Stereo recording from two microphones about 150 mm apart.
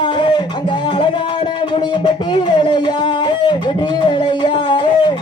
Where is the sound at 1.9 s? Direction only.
35° left (ahead or behind).